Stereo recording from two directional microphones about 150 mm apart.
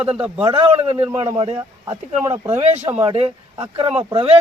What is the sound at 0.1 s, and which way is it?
Speech, 10° right (ahead or behind).